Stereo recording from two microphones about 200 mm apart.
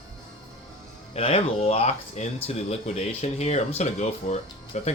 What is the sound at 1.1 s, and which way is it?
A man's voice, 30° left (ahead or behind).